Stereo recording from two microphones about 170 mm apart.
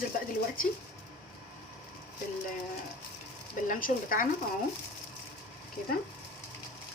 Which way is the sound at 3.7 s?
55° left (ahead or behind).